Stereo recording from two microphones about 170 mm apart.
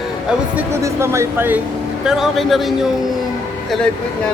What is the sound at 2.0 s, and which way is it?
Speech, centre (ahead or behind).